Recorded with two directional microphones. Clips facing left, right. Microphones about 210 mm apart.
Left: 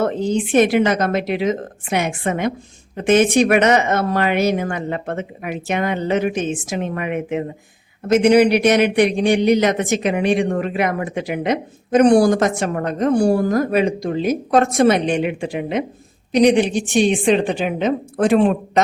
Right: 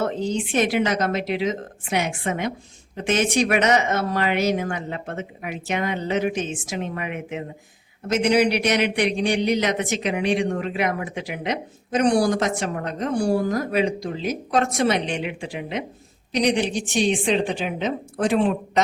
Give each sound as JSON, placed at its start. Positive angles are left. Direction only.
{"t": 0.0, "sound": "a man's voice", "side_deg": 55}